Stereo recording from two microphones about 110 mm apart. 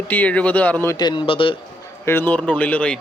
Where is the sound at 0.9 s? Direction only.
45° left (ahead or behind).